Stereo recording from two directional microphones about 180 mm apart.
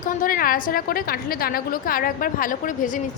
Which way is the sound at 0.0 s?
50° left (ahead or behind).